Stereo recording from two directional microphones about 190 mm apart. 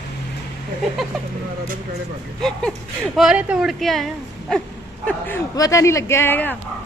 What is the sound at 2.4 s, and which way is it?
Speech, 5° left (ahead or behind).